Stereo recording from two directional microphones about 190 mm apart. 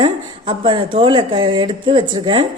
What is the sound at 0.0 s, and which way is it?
A woman's voice, 25° right (ahead or behind).